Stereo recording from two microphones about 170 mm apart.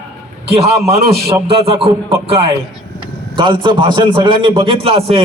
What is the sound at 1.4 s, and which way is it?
A man's voice, 35° right (ahead or behind).